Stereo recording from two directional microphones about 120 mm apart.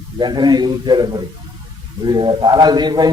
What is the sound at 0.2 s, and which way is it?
Speech, 35° right (ahead or behind).